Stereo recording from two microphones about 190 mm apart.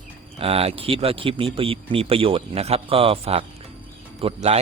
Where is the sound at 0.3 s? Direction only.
30° right (ahead or behind).